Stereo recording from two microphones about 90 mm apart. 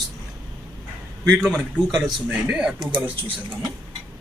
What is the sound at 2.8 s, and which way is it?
Speech, 70° right (ahead or behind).